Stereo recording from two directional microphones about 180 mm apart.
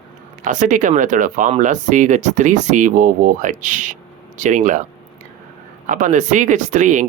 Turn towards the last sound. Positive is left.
turn(degrees=-45)  # may be behind; listen again after turning